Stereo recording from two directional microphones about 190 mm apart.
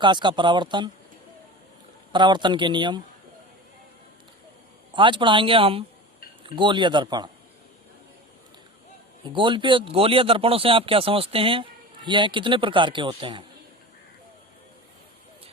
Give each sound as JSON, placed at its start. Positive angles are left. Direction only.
{"t": 0.0, "sound": "speech", "side_deg": -25}
{"t": 2.1, "sound": "speech", "side_deg": -25}
{"t": 4.9, "sound": "speech", "side_deg": -25}
{"t": 9.2, "sound": "speech", "side_deg": -25}